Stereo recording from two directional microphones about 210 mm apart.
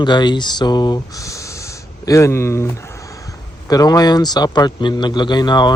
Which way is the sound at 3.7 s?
20° left (ahead or behind).